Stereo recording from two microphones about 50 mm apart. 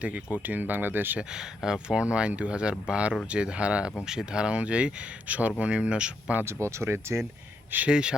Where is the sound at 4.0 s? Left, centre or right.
Centre.